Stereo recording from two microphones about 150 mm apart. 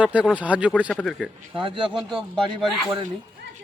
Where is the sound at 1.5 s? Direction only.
35° right (ahead or behind).